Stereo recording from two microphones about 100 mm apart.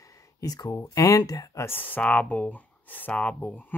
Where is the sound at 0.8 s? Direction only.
30° left (ahead or behind).